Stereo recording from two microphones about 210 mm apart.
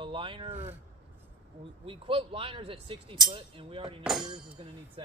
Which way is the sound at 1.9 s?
25° right (ahead or behind).